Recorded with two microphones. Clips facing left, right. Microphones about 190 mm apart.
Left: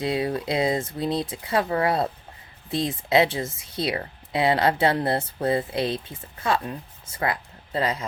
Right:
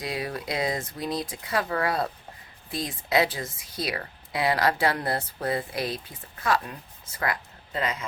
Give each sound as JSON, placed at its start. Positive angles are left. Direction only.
{"t": 0.0, "sound": "speech", "side_deg": 25}